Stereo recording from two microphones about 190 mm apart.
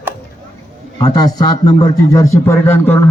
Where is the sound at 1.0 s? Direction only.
20° left (ahead or behind).